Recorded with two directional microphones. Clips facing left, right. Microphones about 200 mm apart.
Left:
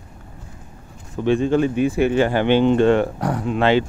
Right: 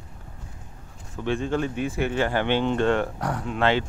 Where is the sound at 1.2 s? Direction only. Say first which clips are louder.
Left 8 dB; 20° left (ahead or behind).